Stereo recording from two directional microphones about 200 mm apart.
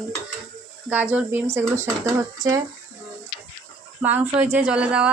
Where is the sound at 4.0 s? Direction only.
10° right (ahead or behind).